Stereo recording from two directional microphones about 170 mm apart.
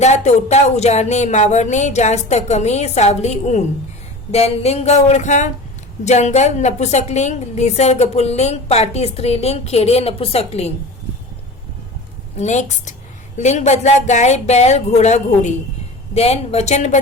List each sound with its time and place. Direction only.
0.0 s a woman's voice: 40° left (ahead or behind)
12.4 s a woman's voice: 45° left (ahead or behind)